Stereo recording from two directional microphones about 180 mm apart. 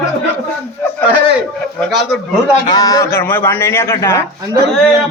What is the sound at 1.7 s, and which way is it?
Speech, centre (ahead or behind).